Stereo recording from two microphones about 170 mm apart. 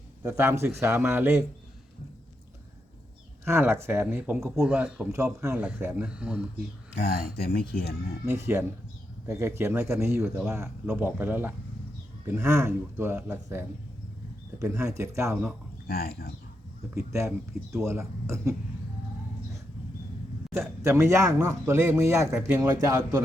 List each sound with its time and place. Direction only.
0.2 s speech: 15° right (ahead or behind)
3.4 s speech: 15° right (ahead or behind)
7.0 s speech: 60° left (ahead or behind)
8.2 s speech: 15° right (ahead or behind)
15.9 s speech: 65° left (ahead or behind)
17.1 s speech: 15° right (ahead or behind)
20.5 s a man's voice: 15° right (ahead or behind)